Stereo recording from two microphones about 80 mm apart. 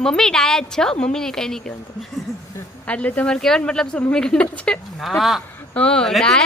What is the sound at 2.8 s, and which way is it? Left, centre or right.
Speech, centre.